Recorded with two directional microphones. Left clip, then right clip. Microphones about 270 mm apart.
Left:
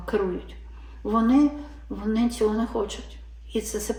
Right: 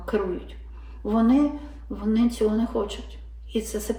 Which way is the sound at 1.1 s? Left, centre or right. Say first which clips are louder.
Left 1 dB; centre.